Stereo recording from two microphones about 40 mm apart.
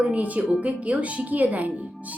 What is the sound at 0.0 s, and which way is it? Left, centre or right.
A woman's voice, right.